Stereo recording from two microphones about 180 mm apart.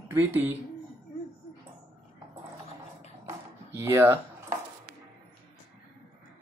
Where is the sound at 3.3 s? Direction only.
15° right (ahead or behind).